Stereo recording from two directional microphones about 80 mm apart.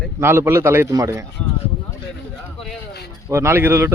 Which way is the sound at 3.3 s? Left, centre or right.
Right.